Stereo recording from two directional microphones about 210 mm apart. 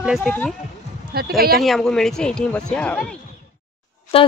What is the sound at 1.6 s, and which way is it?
Speech, centre (ahead or behind).